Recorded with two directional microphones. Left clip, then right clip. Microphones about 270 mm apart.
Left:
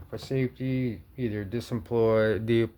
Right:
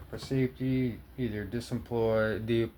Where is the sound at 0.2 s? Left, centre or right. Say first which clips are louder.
Left 1 dB; left.